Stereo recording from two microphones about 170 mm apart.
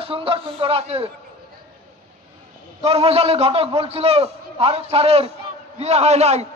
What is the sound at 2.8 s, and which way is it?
A man's voice, 35° right (ahead or behind).